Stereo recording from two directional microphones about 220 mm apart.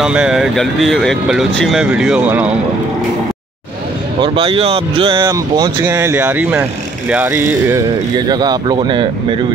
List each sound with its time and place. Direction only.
0.0 s speech: 5° right (ahead or behind)
4.2 s speech: 25° right (ahead or behind)